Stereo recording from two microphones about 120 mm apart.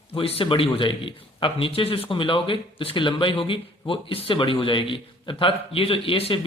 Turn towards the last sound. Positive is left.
turn(degrees=50)  # may be behind; listen again after turning